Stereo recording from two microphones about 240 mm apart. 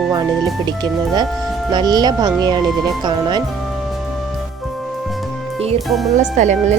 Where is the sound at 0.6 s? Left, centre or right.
Centre.